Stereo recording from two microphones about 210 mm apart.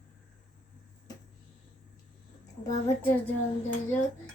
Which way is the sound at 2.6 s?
10° left (ahead or behind).